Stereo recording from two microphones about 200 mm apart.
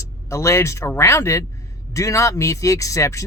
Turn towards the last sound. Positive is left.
turn(degrees=15)  # may be behind; listen again after turning